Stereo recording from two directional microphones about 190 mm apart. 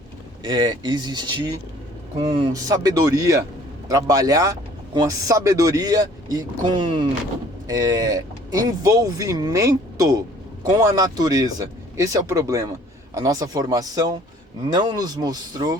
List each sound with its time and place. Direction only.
0.4 s speech: 20° right (ahead or behind)
2.5 s speech: 20° right (ahead or behind)